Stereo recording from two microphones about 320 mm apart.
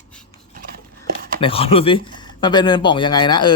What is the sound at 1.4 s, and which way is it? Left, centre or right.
Speech, centre.